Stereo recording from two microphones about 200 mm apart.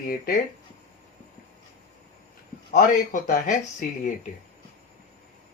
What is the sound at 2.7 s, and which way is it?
Speech, 45° left (ahead or behind).